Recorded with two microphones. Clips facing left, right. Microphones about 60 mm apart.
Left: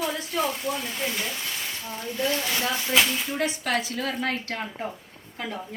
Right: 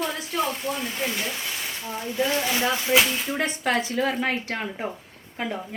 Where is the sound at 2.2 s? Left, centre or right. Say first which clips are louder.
Even; right.